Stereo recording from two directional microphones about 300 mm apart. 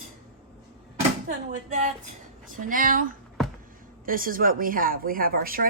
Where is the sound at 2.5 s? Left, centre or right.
Right.